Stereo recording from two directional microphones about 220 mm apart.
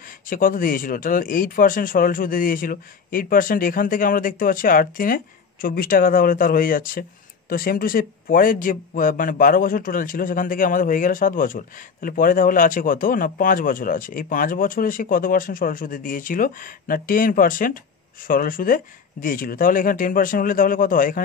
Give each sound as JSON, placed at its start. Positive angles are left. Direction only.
{"t": 0.3, "sound": "speech", "side_deg": 40}